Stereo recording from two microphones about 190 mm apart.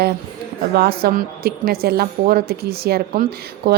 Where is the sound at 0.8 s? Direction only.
55° right (ahead or behind).